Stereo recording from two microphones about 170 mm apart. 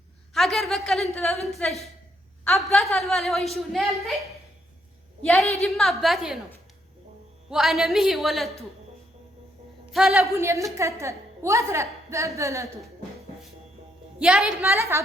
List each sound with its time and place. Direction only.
0.3 s a sound: centre (ahead or behind)
1.1 s a woman's voice: 5° left (ahead or behind)
5.2 s a woman's voice: 5° left (ahead or behind)
7.5 s a woman's voice: centre (ahead or behind)
9.9 s a woman's voice: centre (ahead or behind)
10.2 s a woman's voice: 15° right (ahead or behind)
14.2 s a woman's voice: 5° right (ahead or behind)
14.6 s a woman's voice: 15° right (ahead or behind)